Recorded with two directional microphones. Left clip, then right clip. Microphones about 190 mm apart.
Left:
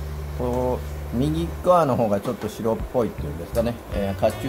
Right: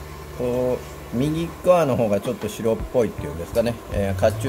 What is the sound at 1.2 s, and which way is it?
Speech, 15° right (ahead or behind).